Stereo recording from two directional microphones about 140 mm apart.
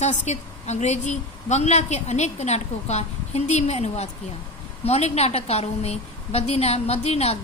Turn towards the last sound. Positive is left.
turn(degrees=45)  # may be behind; listen again after turning